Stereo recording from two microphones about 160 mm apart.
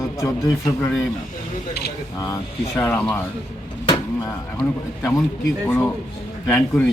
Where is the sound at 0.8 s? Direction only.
5° left (ahead or behind).